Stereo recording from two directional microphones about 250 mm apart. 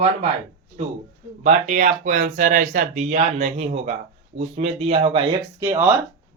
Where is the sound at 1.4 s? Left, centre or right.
Right.